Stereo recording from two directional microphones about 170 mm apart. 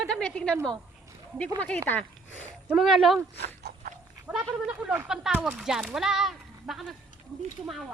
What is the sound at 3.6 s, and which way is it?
Dog, 60° right (ahead or behind).